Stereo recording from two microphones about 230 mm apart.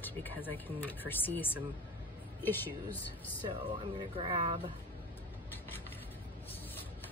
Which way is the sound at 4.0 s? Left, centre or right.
Right.